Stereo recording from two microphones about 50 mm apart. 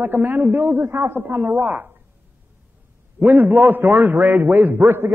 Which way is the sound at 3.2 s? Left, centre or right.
Right.